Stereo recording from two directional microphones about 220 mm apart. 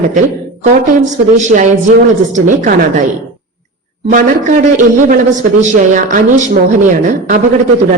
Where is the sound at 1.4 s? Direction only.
35° right (ahead or behind).